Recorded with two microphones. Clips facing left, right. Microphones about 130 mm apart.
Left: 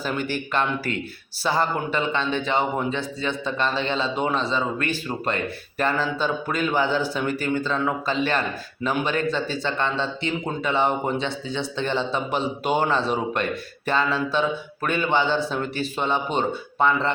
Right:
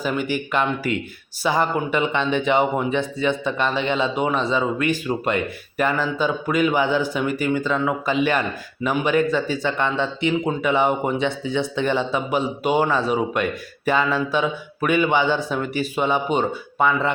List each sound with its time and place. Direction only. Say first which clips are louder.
0.0 s speech: right 3 dB; 10° right (ahead or behind)